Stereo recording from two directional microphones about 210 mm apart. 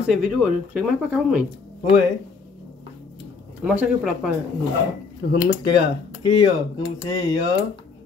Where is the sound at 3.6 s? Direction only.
5° right (ahead or behind).